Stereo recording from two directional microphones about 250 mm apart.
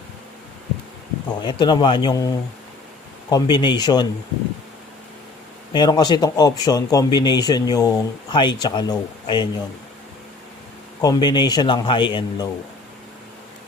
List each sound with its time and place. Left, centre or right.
1.4 s speech: centre
5.7 s speech: centre
11.0 s speech: centre